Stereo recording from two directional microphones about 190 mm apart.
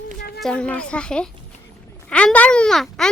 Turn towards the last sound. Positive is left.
turn(degrees=0)  # may be behind; listen again after turning